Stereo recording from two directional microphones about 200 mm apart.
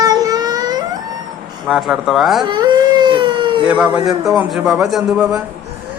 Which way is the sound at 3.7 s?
5° right (ahead or behind).